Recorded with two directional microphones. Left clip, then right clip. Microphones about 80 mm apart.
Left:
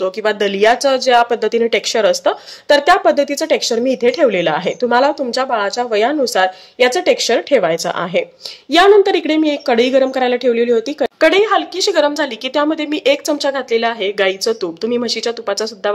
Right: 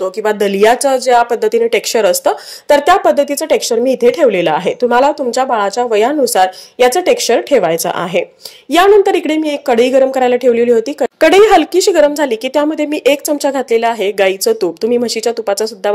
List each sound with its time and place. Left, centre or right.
0.0 s speech: right
11.1 s speech: right